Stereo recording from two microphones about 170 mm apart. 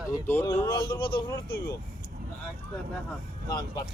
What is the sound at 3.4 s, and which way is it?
Speech, 25° left (ahead or behind).